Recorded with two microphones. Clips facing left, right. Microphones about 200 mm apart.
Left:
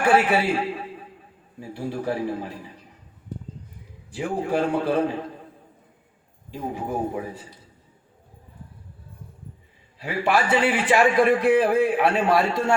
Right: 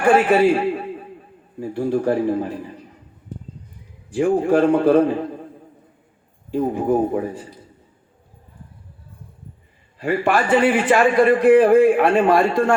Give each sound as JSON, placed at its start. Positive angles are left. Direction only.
{"t": 0.1, "sound": "a man's voice", "side_deg": -50}
{"t": 1.5, "sound": "a man's voice", "side_deg": -50}
{"t": 4.1, "sound": "a man's voice", "side_deg": -55}
{"t": 6.5, "sound": "a man's voice", "side_deg": -55}
{"t": 10.0, "sound": "a man's voice", "side_deg": -50}